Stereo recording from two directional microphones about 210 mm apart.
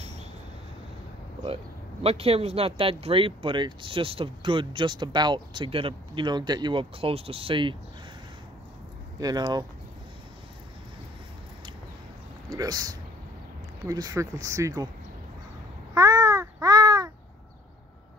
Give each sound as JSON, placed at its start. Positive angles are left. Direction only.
{"t": 2.0, "sound": "speech", "side_deg": -30}
{"t": 9.2, "sound": "speech", "side_deg": -20}
{"t": 12.4, "sound": "speech", "side_deg": -20}
{"t": 15.9, "sound": "babbling", "side_deg": -15}